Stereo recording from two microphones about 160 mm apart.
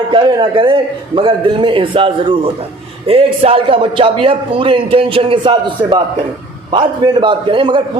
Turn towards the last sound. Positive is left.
turn(degrees=-30)  # may be behind; listen again after turning